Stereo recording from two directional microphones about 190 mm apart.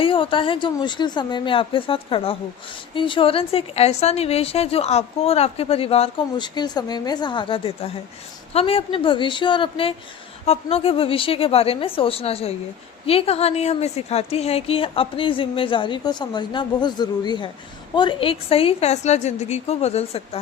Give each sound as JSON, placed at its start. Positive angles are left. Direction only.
{"t": 0.0, "sound": "a woman's voice", "side_deg": 25}